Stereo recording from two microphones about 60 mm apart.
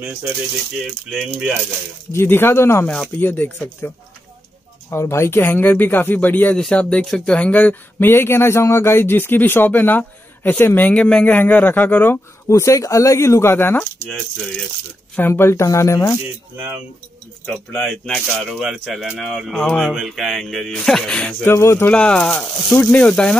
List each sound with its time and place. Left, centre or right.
2.1 s speech: left
3.2 s speech: left
4.9 s speech: left
7.1 s speech: centre
7.3 s speech: left
8.0 s speech: left
12.4 s speech: left
13.2 s speech: left
15.1 s speech: left
17.8 s speech: centre
21.2 s speech: left
21.5 s speech: left
21.9 s speech: centre